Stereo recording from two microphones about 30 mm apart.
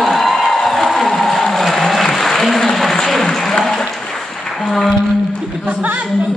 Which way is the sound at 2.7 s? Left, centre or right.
Centre.